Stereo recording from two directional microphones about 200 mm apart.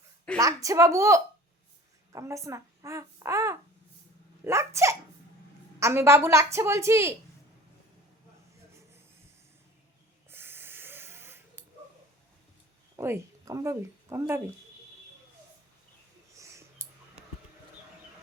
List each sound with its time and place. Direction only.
0.3 s a child's voice: 15° right (ahead or behind)
10.2 s a sound: 10° right (ahead or behind)
13.0 s speech: 15° right (ahead or behind)